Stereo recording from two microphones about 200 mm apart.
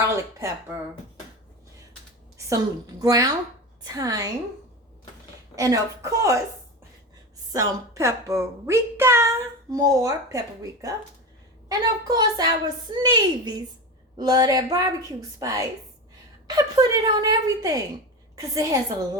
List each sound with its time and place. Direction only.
0.0 s a sound: 15° right (ahead or behind)
2.5 s a woman's voice: 15° right (ahead or behind)
5.5 s a woman's voice: 15° right (ahead or behind)
7.5 s a woman's voice: 15° right (ahead or behind)